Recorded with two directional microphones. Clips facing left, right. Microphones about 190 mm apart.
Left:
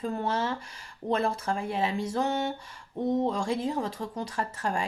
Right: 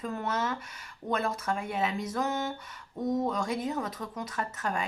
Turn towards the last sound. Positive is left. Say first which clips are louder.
# left 2 dB
turn(degrees=30)  # may be behind; listen again after turning